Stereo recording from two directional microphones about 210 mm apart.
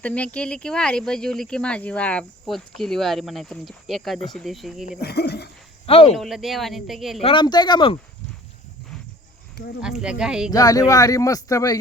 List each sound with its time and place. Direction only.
0.0 s speech: 5° left (ahead or behind)
4.9 s speech: 50° left (ahead or behind)
5.8 s speech: 25° left (ahead or behind)
6.1 s speech: centre (ahead or behind)
7.2 s speech: 25° left (ahead or behind)
9.8 s speech: 5° right (ahead or behind)
10.5 s speech: 15° left (ahead or behind)